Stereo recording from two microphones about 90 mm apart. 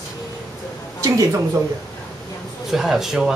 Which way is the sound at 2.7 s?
5° right (ahead or behind).